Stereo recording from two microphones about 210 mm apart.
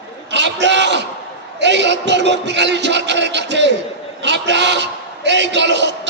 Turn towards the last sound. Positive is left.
turn(degrees=-55)  # may be behind; listen again after turning